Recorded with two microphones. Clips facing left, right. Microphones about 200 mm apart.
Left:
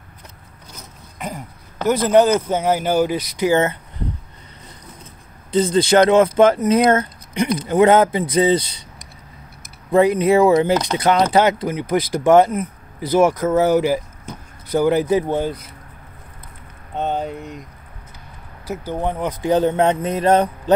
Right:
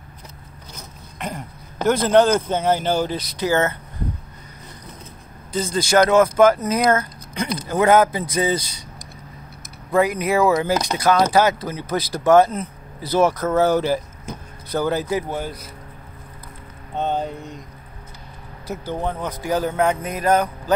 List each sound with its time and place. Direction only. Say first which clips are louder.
1.9 s speech: left 1 dB; 5° left (ahead or behind)
5.5 s speech: left 5 dB; 25° left (ahead or behind)
9.9 s speech: left 5 dB; 25° left (ahead or behind)
18.7 s speech: left 2 dB; 15° left (ahead or behind)